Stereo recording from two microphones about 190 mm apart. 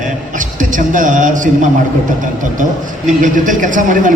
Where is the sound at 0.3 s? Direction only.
45° right (ahead or behind).